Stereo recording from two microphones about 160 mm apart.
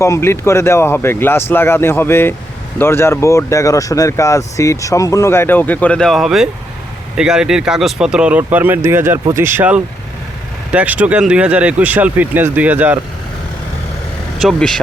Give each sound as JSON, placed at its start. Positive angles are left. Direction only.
{"t": 0.0, "sound": "speech", "side_deg": 15}
{"t": 14.3, "sound": "speech", "side_deg": 0}